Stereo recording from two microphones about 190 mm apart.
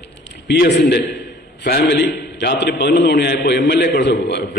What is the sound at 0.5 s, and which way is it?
A man's voice, 65° left (ahead or behind).